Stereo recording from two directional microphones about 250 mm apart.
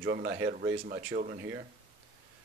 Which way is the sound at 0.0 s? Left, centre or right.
Right.